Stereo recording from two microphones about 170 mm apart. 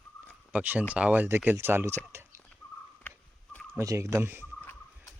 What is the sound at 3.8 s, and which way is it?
Speech, 15° right (ahead or behind).